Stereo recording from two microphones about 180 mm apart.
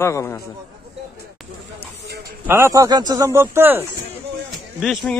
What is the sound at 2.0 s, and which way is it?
Speech, 65° right (ahead or behind).